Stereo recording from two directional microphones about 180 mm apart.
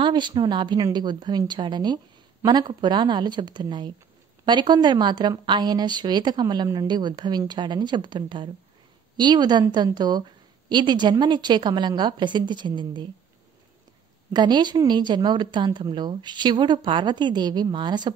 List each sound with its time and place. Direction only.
0.0 s a woman's voice: 25° right (ahead or behind)
14.3 s a woman's voice: 25° right (ahead or behind)